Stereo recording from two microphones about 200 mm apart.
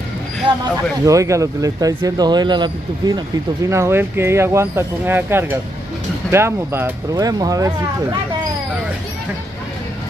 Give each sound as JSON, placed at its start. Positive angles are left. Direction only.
{"t": 0.5, "sound": "speech", "side_deg": -25}